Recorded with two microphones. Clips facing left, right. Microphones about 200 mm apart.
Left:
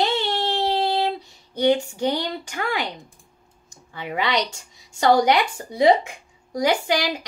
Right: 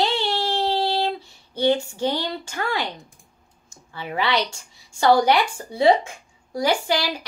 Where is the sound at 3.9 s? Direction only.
20° left (ahead or behind).